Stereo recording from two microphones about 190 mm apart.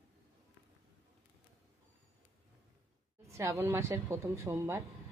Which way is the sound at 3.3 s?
15° right (ahead or behind).